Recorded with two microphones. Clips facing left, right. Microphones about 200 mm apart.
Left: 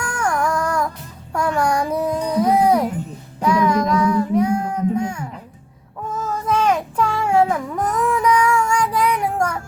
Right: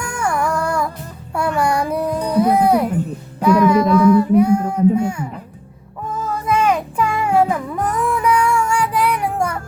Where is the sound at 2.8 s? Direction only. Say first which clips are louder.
Right 5 dB; 60° right (ahead or behind).